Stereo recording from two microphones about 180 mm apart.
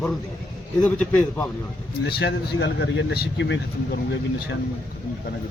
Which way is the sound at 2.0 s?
65° left (ahead or behind).